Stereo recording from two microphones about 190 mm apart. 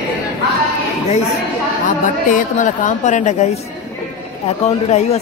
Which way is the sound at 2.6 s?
40° left (ahead or behind).